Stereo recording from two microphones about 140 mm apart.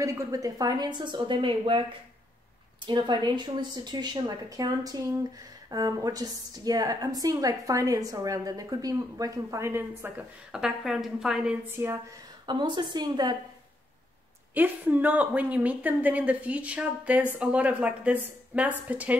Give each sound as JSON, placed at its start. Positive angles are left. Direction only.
{"t": 0.0, "sound": "speech", "side_deg": -20}
{"t": 2.9, "sound": "a woman's voice", "side_deg": -30}
{"t": 11.7, "sound": "speech", "side_deg": -20}
{"t": 12.4, "sound": "speech", "side_deg": -35}
{"t": 14.5, "sound": "speech", "side_deg": -10}